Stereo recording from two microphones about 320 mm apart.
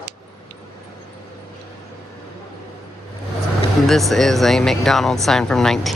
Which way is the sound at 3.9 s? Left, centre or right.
Centre.